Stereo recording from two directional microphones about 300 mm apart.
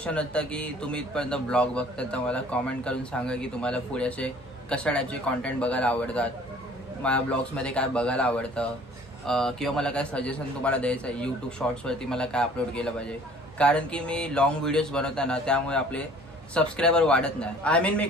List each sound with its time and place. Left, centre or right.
0.0 s speech: centre